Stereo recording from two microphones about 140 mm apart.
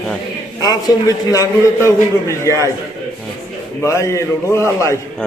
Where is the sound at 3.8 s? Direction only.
20° left (ahead or behind).